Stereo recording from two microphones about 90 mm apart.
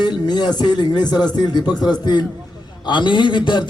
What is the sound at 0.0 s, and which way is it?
A man's voice, 50° left (ahead or behind).